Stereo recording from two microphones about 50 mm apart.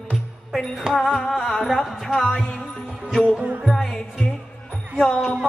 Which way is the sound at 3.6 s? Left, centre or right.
Centre.